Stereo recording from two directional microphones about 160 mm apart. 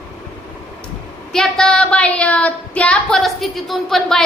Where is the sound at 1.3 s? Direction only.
5° left (ahead or behind).